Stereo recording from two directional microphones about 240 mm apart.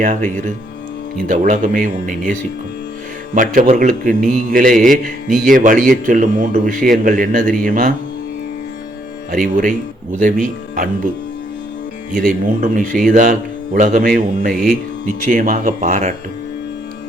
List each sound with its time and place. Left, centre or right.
0.0 s a man's voice: right
9.3 s a man's voice: right
12.1 s a man's voice: right